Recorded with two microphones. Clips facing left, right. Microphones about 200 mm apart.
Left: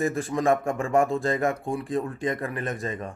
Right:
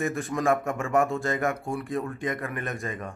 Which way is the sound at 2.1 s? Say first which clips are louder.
Left 2 dB; 30° left (ahead or behind).